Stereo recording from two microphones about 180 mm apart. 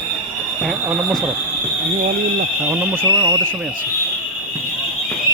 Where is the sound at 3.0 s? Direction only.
20° right (ahead or behind).